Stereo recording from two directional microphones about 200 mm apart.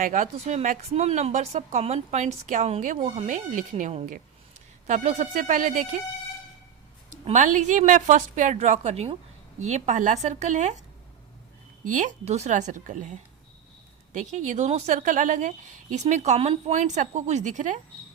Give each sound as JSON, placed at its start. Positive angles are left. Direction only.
{"t": 0.0, "sound": "a woman's voice", "side_deg": -40}
{"t": 7.3, "sound": "a woman's voice", "side_deg": -40}
{"t": 11.9, "sound": "a woman's voice", "side_deg": -40}